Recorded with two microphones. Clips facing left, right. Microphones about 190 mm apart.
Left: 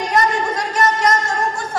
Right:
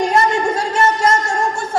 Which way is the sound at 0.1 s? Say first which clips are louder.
Right 3 dB; 25° right (ahead or behind).